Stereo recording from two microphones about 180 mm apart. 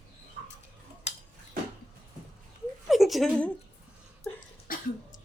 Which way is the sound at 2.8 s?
Centre (ahead or behind).